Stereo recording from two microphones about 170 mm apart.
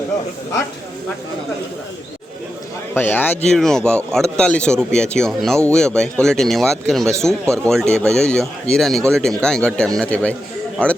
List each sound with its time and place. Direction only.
2.9 s speech: 10° left (ahead or behind)
7.4 s speech: 15° right (ahead or behind)
7.7 s speech: 5° left (ahead or behind)